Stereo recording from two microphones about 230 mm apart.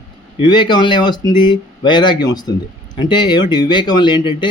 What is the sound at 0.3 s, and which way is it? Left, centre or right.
A man's voice, centre.